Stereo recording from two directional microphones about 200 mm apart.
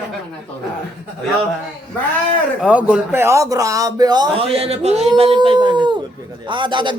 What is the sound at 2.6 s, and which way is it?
Speech, 5° right (ahead or behind).